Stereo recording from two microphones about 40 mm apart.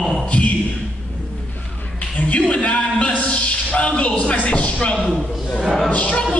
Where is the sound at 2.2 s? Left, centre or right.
Left.